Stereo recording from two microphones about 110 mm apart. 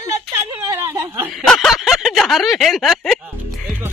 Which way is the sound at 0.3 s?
30° right (ahead or behind).